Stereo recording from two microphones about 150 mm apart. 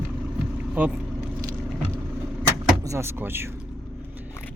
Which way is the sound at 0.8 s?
10° right (ahead or behind).